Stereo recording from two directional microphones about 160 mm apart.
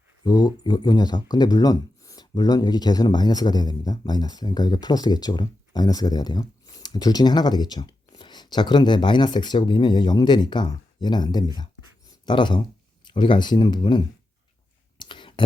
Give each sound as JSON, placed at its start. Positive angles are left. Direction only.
{"t": 0.3, "sound": "speech", "side_deg": 25}
{"t": 14.9, "sound": "whispering", "side_deg": 30}